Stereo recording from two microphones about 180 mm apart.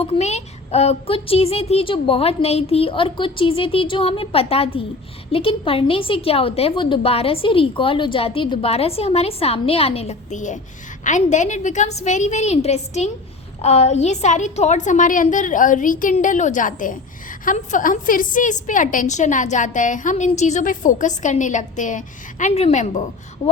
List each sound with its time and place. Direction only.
0.0 s a woman's voice: 35° left (ahead or behind)